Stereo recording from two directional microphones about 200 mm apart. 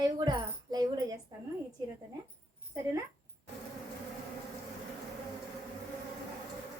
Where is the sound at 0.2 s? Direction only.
20° right (ahead or behind).